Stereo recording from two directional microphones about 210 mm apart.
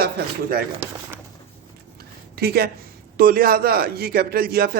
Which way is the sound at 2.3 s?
50° right (ahead or behind).